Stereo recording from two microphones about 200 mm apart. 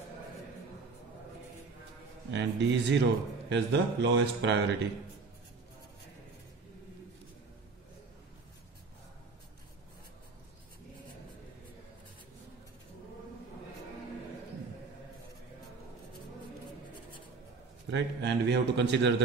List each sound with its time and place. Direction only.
2.3 s a man's voice: 60° right (ahead or behind)
17.8 s a man's voice: 60° right (ahead or behind)